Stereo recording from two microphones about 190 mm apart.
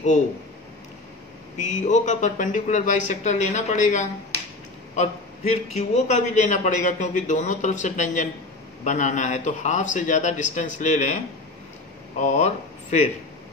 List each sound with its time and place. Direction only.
1.6 s a man's voice: 40° left (ahead or behind)
12.2 s a man's voice: 40° left (ahead or behind)